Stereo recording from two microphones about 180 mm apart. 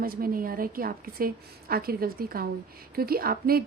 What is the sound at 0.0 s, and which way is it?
A woman's voice, 55° right (ahead or behind).